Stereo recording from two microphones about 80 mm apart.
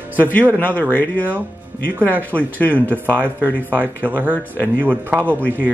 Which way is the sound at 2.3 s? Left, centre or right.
Right.